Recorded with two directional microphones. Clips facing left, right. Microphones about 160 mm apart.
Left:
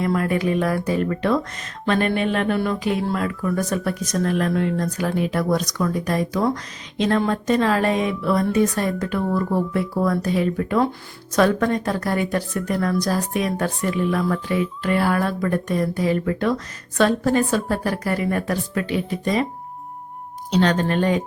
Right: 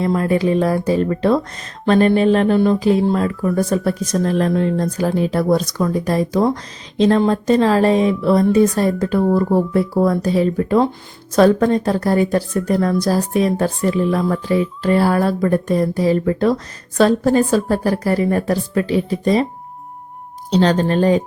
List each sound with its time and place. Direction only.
0.0 s speech: 30° right (ahead or behind)
20.5 s speech: 30° right (ahead or behind)